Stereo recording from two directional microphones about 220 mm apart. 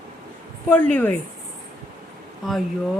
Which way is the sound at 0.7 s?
5° left (ahead or behind).